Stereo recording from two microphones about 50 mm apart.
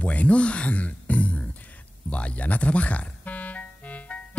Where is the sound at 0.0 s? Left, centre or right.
Left.